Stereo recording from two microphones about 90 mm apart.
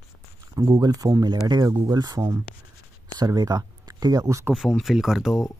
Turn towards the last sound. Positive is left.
turn(degrees=-5)  # may be behind; listen again after turning